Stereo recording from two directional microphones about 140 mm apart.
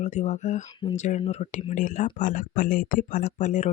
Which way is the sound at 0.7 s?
35° left (ahead or behind).